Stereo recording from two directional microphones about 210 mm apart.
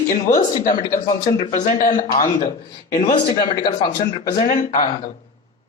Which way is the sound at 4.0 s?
40° left (ahead or behind).